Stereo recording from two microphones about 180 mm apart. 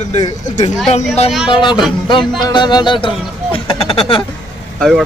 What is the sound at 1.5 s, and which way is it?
Speech, 25° left (ahead or behind).